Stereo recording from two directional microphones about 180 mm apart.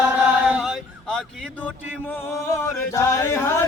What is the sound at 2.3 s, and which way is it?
Chant, 15° left (ahead or behind).